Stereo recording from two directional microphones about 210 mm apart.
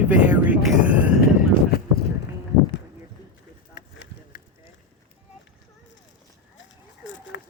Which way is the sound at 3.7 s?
45° left (ahead or behind).